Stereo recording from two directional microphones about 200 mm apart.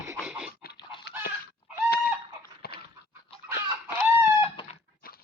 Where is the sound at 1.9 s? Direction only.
50° left (ahead or behind).